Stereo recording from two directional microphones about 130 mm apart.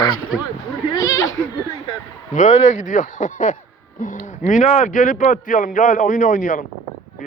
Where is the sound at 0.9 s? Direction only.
30° left (ahead or behind).